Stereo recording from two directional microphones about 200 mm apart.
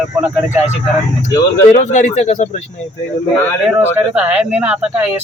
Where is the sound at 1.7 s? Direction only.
35° left (ahead or behind).